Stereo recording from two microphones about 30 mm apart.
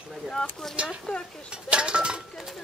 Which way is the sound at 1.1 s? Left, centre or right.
Left.